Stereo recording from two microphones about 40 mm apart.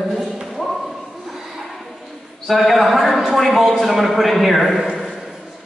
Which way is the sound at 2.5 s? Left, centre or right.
Centre.